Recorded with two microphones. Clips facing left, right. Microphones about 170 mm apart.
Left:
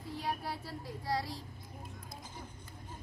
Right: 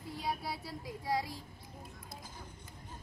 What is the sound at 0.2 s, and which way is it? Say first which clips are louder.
Speech: right 1 dB; 10° right (ahead or behind).